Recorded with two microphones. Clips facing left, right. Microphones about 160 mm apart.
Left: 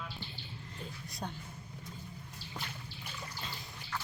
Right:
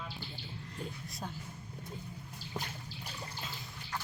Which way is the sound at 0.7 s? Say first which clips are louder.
Right 4 dB; centre (ahead or behind).